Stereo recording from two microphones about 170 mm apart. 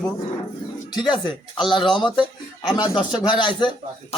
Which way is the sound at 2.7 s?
25° left (ahead or behind).